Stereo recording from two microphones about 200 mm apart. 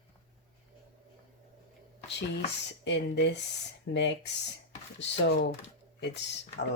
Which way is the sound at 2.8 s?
60° left (ahead or behind).